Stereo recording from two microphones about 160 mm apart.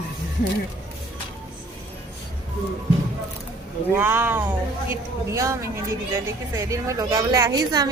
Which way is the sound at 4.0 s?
15° right (ahead or behind).